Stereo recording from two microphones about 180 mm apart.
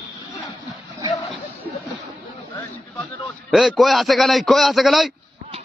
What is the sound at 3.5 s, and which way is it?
A man's voice, centre (ahead or behind).